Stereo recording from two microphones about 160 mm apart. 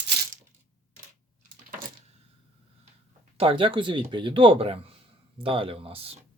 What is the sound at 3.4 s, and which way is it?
Speech, 35° right (ahead or behind).